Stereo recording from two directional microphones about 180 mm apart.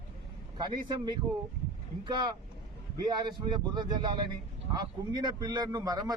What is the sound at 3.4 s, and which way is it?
Speech, 25° right (ahead or behind).